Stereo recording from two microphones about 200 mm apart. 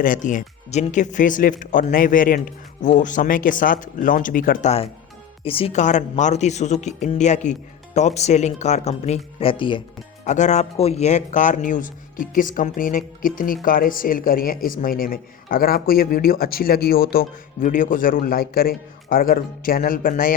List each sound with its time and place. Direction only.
0.0 s speech: 40° left (ahead or behind); by 9.8 s 25° left (ahead or behind)
10.2 s speech: 35° left (ahead or behind)